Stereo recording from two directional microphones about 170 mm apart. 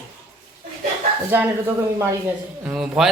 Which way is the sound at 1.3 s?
10° right (ahead or behind).